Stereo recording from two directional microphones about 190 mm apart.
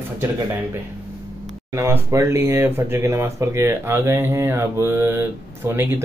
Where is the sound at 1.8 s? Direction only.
15° right (ahead or behind).